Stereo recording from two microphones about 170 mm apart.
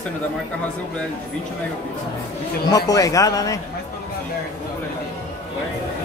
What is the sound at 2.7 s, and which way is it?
Speech, 20° left (ahead or behind).